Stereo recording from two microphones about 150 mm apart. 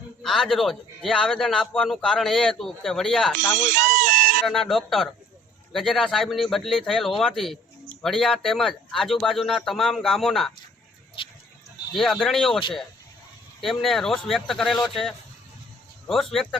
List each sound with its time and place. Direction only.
0.2 s a man's voice: centre (ahead or behind)
3.5 s a sound: 60° right (ahead or behind)
4.4 s a man's voice: centre (ahead or behind)
11.9 s a man's voice: centre (ahead or behind)
13.6 s a man's voice: centre (ahead or behind)